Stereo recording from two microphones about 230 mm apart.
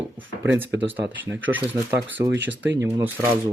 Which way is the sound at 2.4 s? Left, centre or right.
Right.